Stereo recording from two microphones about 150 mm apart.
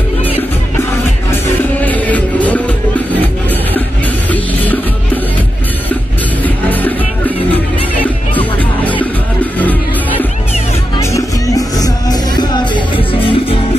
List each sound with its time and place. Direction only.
1.8 s music: 10° left (ahead or behind)
4.3 s music: 10° left (ahead or behind)
6.4 s music: 10° left (ahead or behind)
11.0 s music: 20° left (ahead or behind); by 13.6 s 40° left (ahead or behind)